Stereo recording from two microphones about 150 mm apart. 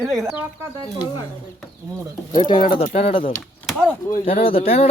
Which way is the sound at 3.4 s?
Centre (ahead or behind).